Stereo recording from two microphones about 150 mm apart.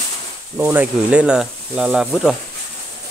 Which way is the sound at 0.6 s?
15° right (ahead or behind).